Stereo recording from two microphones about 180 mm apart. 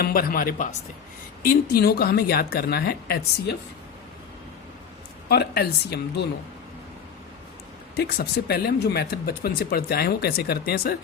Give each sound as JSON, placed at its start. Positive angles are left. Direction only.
{"t": 0.0, "sound": "speech", "side_deg": 55}
{"t": 5.3, "sound": "speech", "side_deg": 65}
{"t": 7.9, "sound": "speech", "side_deg": 60}